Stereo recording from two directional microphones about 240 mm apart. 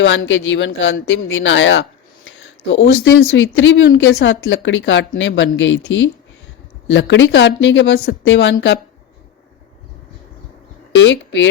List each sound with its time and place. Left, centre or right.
0.0 s speech: left
6.8 s speech: left
10.9 s speech: left